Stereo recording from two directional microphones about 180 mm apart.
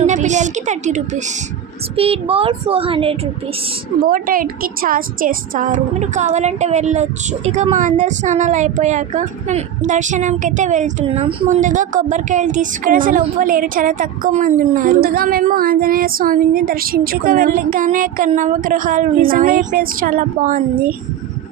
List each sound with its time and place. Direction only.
0.0 s a woman's voice: 40° right (ahead or behind)
4.0 s a woman's voice: 50° right (ahead or behind); by 11.4 s 30° right (ahead or behind)
11.4 s speech: 45° right (ahead or behind)